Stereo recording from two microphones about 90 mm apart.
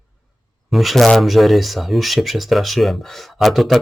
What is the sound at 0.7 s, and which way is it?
Speech, centre (ahead or behind).